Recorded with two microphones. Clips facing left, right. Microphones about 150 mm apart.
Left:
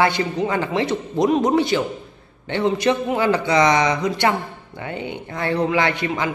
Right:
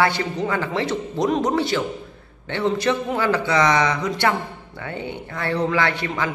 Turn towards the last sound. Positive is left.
turn(degrees=15)  # may be behind; listen again after turning